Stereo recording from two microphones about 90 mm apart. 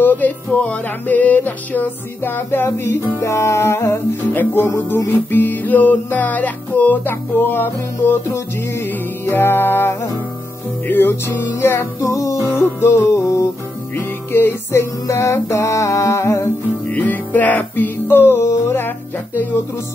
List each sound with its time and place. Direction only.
0.0 s music: 20° left (ahead or behind)
16.9 s music: 20° left (ahead or behind)